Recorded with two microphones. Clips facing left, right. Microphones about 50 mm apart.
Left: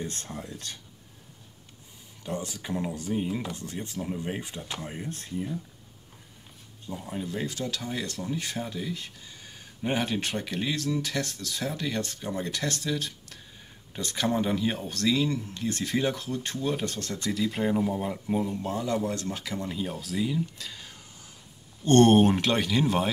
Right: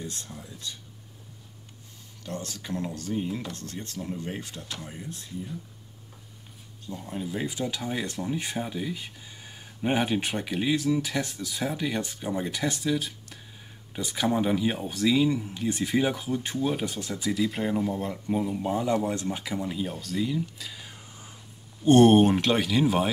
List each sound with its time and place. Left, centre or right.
0.0 s speech: left
2.2 s speech: centre
5.1 s speech: left
6.9 s speech: centre
7.2 s speech: centre